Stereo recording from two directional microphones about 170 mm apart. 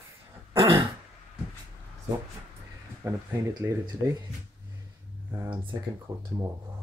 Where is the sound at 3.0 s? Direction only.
20° right (ahead or behind).